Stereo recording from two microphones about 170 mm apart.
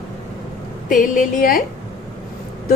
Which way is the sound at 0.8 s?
50° left (ahead or behind).